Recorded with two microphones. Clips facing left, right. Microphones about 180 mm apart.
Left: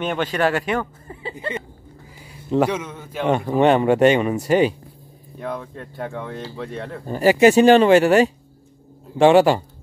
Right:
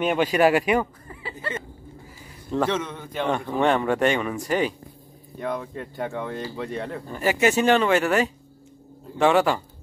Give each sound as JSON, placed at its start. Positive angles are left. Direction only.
{"t": 0.0, "sound": "speech", "side_deg": -10}
{"t": 1.3, "sound": "a sound", "side_deg": 15}
{"t": 2.5, "sound": "a man's voice", "side_deg": 10}
{"t": 3.6, "sound": "speech", "side_deg": 20}
{"t": 5.4, "sound": "speech", "side_deg": 0}
{"t": 7.1, "sound": "speech", "side_deg": 35}